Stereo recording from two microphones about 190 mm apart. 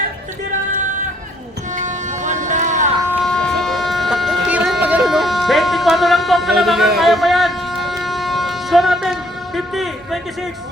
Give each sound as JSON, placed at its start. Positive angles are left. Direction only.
{"t": 1.7, "sound": "vehicle", "side_deg": -40}
{"t": 3.2, "sound": "a sound", "side_deg": 5}
{"t": 9.7, "sound": "a man's voice", "side_deg": 0}